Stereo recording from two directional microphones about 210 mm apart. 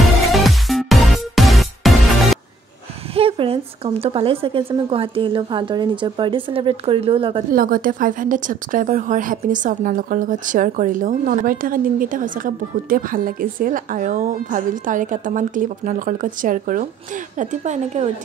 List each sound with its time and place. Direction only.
0.0 s music: centre (ahead or behind)
3.2 s a woman's voice: 25° right (ahead or behind)
7.5 s a woman's voice: 40° right (ahead or behind)